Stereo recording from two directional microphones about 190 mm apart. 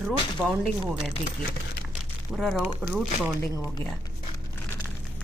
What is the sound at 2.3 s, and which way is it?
Speech, centre (ahead or behind).